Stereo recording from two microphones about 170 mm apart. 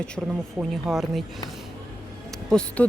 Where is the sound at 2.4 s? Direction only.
5° left (ahead or behind).